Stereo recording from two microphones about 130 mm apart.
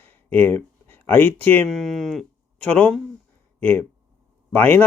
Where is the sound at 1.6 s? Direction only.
Centre (ahead or behind).